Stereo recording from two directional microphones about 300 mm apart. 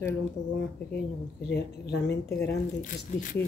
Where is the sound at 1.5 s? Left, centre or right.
Left.